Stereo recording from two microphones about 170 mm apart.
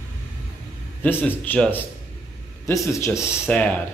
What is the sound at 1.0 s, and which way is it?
Speech, 10° left (ahead or behind).